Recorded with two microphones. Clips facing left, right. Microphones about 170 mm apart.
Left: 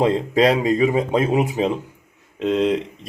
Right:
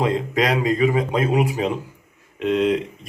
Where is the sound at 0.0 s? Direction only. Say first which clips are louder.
Left 4 dB; 30° left (ahead or behind).